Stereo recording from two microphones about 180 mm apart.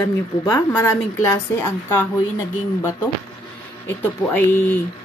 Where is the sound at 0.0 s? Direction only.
15° left (ahead or behind).